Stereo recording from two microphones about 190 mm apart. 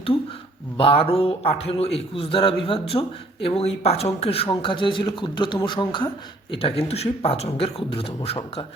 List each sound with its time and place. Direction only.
0.8 s speech: 30° left (ahead or behind)